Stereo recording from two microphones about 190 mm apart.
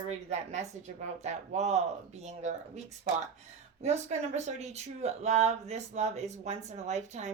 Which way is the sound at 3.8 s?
35° right (ahead or behind).